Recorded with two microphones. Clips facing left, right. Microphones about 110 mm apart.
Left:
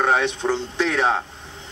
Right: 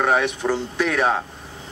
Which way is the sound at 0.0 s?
20° left (ahead or behind).